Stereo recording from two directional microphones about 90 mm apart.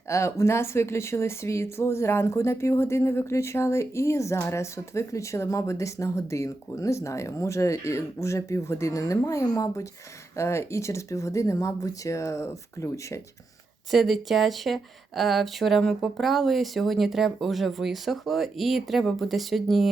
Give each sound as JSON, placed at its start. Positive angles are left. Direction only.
{"t": 0.1, "sound": "speech", "side_deg": 35}
{"t": 13.9, "sound": "speech", "side_deg": 0}